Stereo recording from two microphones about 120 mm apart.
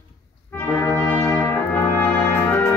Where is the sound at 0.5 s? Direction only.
20° left (ahead or behind).